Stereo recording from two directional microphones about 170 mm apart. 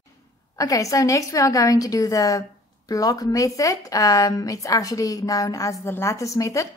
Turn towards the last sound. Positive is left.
turn(degrees=20)  # may be behind; listen again after turning